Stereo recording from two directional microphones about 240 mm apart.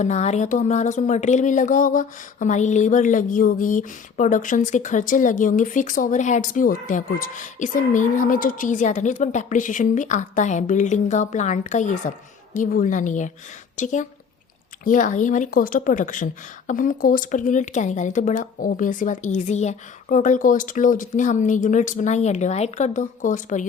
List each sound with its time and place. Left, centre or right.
0.0 s speech: left